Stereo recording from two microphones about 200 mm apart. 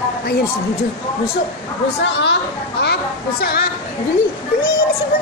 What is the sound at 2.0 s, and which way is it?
Speech, 65° left (ahead or behind).